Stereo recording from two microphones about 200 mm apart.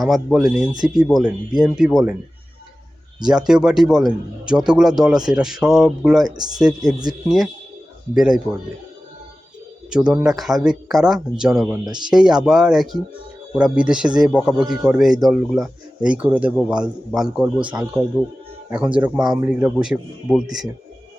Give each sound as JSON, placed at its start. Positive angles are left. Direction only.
{"t": 0.0, "sound": "a man's voice", "side_deg": 0}
{"t": 3.2, "sound": "a man's voice", "side_deg": -5}
{"t": 6.2, "sound": "speech", "side_deg": -20}
{"t": 6.6, "sound": "a man's voice", "side_deg": -5}
{"t": 9.9, "sound": "a man's voice", "side_deg": -5}